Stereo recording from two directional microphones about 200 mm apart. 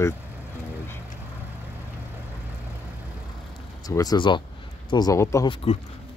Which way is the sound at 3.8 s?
20° left (ahead or behind).